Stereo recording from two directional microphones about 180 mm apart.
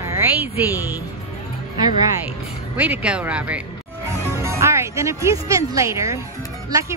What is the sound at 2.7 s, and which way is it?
A woman's voice, 5° right (ahead or behind).